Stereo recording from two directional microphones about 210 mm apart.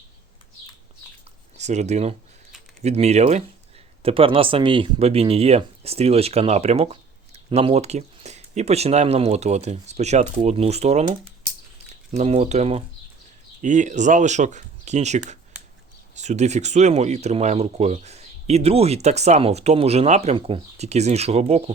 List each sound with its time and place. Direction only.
1.5 s speech: 35° right (ahead or behind)
12.1 s speech: 30° right (ahead or behind)